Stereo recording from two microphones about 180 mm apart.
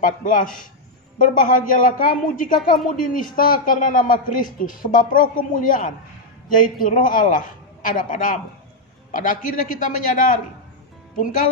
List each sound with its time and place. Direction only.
0.0 s a man's voice: 45° left (ahead or behind)